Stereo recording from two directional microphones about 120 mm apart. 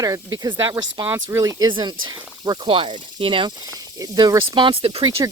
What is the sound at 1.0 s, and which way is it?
Speech, 20° right (ahead or behind).